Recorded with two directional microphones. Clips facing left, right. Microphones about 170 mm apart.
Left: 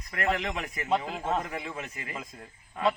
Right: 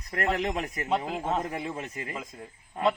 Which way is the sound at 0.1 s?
35° right (ahead or behind).